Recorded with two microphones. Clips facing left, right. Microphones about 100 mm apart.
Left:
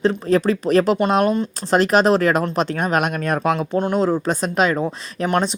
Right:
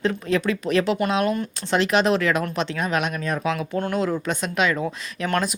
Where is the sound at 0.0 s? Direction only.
35° left (ahead or behind).